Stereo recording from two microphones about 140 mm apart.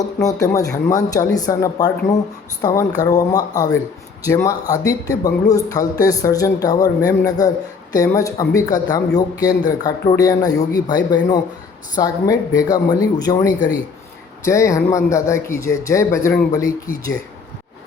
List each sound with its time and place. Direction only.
0.0 s a man's voice: 25° left (ahead or behind)